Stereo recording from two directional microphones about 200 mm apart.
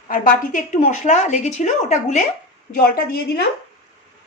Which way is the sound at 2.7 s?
45° left (ahead or behind).